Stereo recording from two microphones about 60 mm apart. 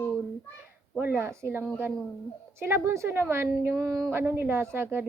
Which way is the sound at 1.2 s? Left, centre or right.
Right.